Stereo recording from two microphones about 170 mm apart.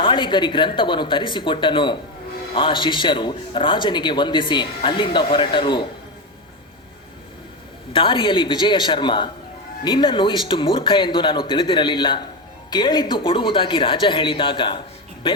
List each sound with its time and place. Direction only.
0.0 s a man's voice: 30° left (ahead or behind)
7.9 s a man's voice: 30° left (ahead or behind)